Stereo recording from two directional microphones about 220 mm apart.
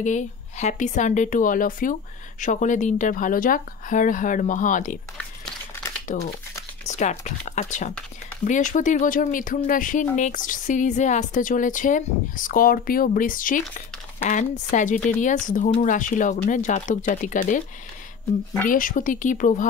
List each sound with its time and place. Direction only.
0.0 s a woman's voice: 35° left (ahead or behind)
6.1 s a woman's voice: 35° left (ahead or behind)
18.7 s a woman's voice: 40° left (ahead or behind)